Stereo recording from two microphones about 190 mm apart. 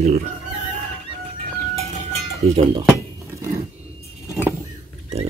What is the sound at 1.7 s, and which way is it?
Cowbell, 35° right (ahead or behind).